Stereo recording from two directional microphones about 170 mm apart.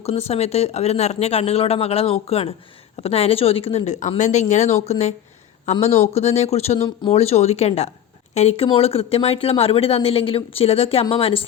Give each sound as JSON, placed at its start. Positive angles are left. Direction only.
{"t": 0.0, "sound": "speech", "side_deg": 40}